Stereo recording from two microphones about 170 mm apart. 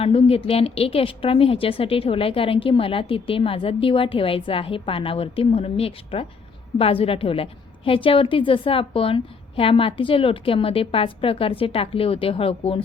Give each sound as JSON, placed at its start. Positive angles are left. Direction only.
{"t": 0.0, "sound": "a woman's voice", "side_deg": 35}